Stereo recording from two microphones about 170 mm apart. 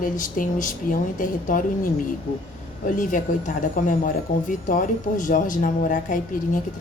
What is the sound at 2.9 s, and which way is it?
Speech, 50° left (ahead or behind).